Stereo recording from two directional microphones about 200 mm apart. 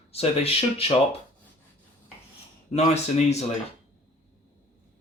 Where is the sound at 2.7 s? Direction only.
30° left (ahead or behind).